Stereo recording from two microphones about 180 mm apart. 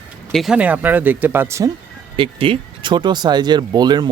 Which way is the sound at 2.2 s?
30° right (ahead or behind).